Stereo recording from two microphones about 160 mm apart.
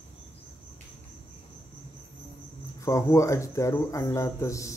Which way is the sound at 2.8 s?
20° left (ahead or behind).